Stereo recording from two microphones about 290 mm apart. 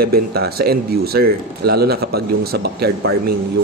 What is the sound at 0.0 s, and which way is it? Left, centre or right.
Speech, right.